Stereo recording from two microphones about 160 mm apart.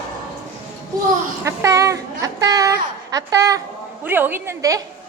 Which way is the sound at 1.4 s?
20° right (ahead or behind).